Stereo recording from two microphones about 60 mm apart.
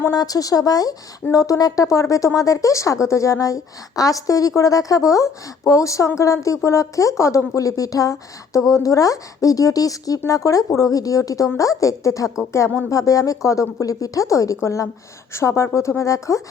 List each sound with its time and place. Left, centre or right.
0.1 s speech: left
1.3 s speech: left
10.2 s speech: left
12.5 s speech: left
12.9 s speech: left